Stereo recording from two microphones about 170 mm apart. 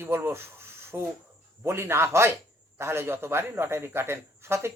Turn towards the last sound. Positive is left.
turn(degrees=-15)  # may be behind; listen again after turning